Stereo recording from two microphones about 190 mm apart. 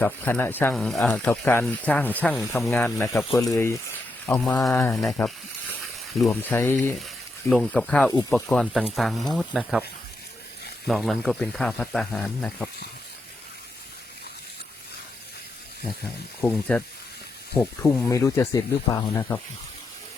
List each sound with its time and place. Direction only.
0.0 s speech: 10° left (ahead or behind)
3.3 s speech: 15° left (ahead or behind)
6.2 s speech: centre (ahead or behind)
10.8 s speech: centre (ahead or behind)
16.4 s speech: 5° left (ahead or behind)
18.1 s speech: 15° left (ahead or behind)